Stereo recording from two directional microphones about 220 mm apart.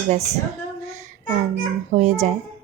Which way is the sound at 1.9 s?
40° right (ahead or behind).